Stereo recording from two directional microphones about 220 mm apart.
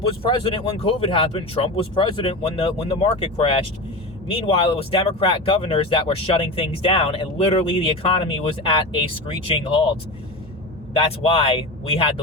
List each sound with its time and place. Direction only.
0.2 s speech: 25° left (ahead or behind)
10.9 s speech: 25° left (ahead or behind)